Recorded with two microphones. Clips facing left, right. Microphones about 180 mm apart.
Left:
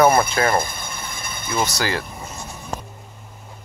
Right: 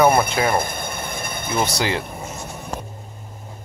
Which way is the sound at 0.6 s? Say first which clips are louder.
Right 4 dB; 60° right (ahead or behind).